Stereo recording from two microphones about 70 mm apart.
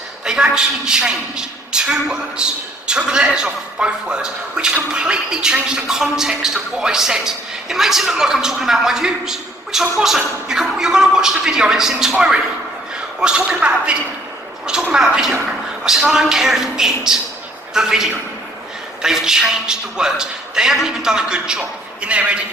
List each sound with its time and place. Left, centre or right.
0.3 s a man's voice: centre
13.1 s a man's voice: centre